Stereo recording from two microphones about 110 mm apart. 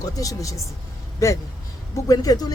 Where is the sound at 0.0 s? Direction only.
30° left (ahead or behind).